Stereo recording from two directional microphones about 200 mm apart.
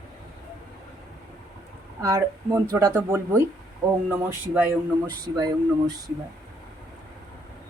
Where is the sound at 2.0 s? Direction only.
15° right (ahead or behind).